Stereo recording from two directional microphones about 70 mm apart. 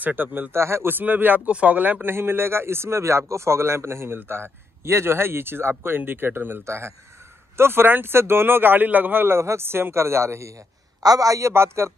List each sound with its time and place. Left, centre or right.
0.0 s speech: right
0.6 s speech: right
6.6 s speech: right
11.0 s a man's voice: right